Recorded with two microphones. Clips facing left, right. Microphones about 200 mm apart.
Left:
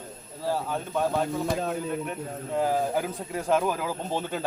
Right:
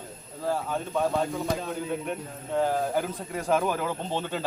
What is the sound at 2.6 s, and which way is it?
Speech, 5° left (ahead or behind).